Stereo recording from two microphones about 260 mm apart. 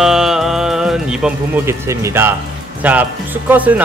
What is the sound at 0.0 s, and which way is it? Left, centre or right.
Speech, centre.